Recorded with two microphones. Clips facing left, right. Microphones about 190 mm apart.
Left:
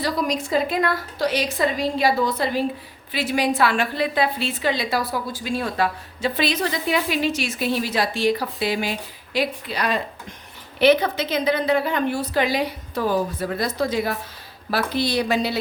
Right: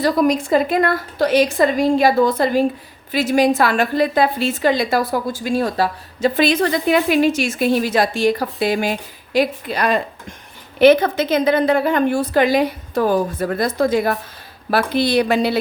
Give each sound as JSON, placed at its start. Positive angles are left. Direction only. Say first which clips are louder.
{"t": 0.0, "sound": "a woman's voice", "louder": "right 7 dB", "side_deg": -50}